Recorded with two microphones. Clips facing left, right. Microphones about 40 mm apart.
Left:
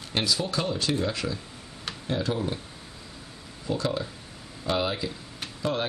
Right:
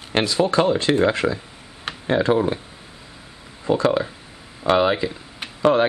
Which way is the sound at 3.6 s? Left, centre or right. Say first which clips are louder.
Right 10 dB; right.